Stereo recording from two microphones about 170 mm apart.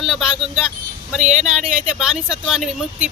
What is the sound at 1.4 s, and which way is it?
Speech, 5° right (ahead or behind).